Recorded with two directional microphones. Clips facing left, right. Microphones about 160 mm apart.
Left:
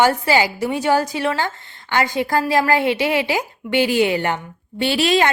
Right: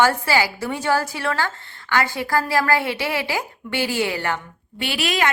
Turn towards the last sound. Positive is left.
turn(degrees=30)  # may be behind; listen again after turning